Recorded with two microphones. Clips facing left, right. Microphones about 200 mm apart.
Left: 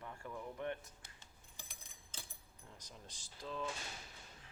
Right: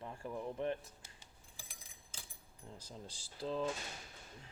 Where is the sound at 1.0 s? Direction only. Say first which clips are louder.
Right 1 dB; 10° right (ahead or behind).